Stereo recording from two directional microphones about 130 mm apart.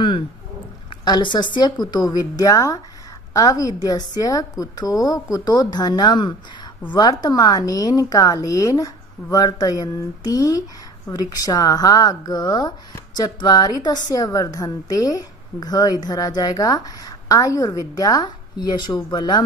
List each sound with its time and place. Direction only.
1.0 s a woman's voice: 35° left (ahead or behind)